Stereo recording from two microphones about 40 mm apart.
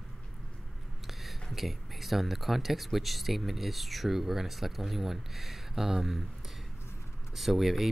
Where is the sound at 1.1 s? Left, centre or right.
Centre.